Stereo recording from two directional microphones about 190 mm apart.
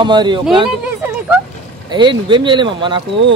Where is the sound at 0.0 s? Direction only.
25° right (ahead or behind).